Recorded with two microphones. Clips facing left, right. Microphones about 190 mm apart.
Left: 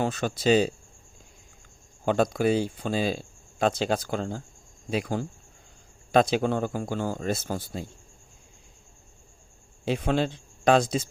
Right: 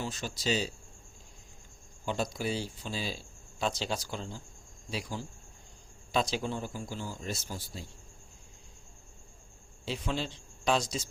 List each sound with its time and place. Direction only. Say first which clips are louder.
0.0 s speech: left 10 dB; 55° left (ahead or behind)
2.0 s speech: left 10 dB; 55° left (ahead or behind)
9.8 s speech: left 9 dB; 55° left (ahead or behind)